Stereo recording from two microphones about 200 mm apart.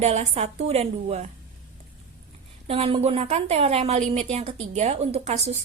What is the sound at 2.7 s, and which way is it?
A woman's voice, 30° right (ahead or behind).